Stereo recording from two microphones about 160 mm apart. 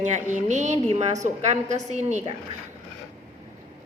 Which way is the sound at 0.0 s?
50° right (ahead or behind).